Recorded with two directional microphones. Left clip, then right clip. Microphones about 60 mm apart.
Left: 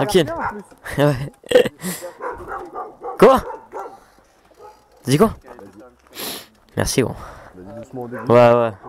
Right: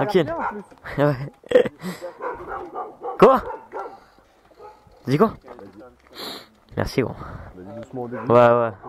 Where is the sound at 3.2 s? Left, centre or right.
Left.